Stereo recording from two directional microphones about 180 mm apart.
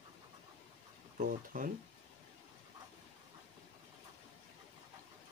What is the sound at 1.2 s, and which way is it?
Speech, 45° right (ahead or behind).